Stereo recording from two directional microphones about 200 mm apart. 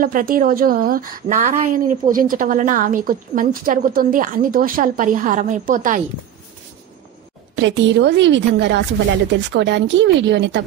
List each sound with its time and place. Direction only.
0.0 s a woman's voice: 45° right (ahead or behind)
7.5 s speech: 65° right (ahead or behind)